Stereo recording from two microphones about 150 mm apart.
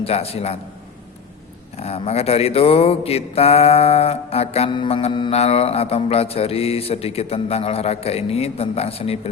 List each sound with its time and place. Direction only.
0.0 s mantra: 40° left (ahead or behind)
1.7 s mantra: 45° left (ahead or behind)